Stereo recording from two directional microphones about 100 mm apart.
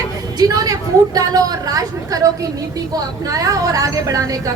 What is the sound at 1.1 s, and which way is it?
A woman's voice, 40° right (ahead or behind).